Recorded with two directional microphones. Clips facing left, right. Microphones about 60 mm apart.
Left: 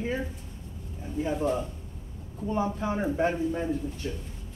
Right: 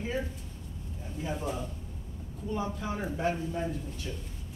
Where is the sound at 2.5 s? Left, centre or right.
Left.